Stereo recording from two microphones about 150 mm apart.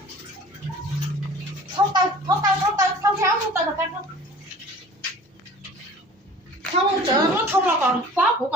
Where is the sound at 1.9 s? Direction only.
30° right (ahead or behind).